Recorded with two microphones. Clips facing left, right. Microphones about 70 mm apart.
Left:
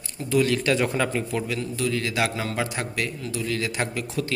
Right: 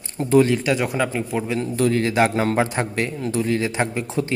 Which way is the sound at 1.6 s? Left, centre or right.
Right.